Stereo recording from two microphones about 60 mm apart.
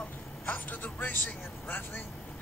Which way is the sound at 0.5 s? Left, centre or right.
Left.